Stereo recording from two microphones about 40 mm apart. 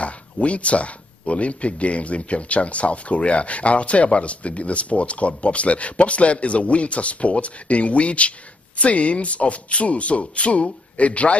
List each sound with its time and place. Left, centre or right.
0.0 s speech: left